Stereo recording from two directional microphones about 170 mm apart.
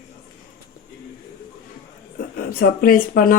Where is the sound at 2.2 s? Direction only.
60° left (ahead or behind).